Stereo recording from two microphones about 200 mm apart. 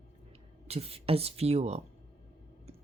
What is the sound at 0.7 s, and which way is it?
Speech, 30° right (ahead or behind).